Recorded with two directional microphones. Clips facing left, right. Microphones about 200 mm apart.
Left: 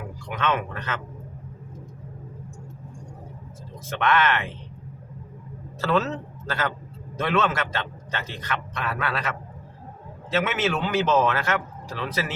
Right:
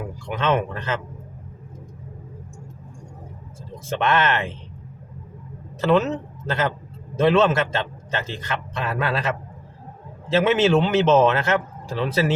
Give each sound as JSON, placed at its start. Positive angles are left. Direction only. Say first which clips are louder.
{"t": 0.3, "sound": "a man's voice", "louder": "right 4 dB", "side_deg": -25}
{"t": 3.8, "sound": "a man's voice", "louder": "right 2 dB", "side_deg": -25}
{"t": 5.8, "sound": "a man's voice", "louder": "right 5 dB", "side_deg": -15}